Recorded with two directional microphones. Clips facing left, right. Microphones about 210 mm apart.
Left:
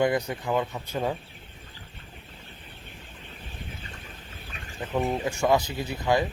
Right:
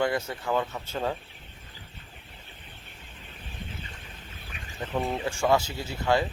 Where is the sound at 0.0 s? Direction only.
20° left (ahead or behind).